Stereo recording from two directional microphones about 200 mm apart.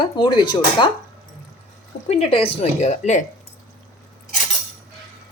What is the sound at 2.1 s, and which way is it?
A woman's voice, 30° left (ahead or behind).